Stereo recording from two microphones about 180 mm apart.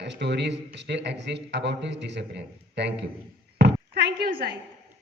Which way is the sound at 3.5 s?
70° right (ahead or behind).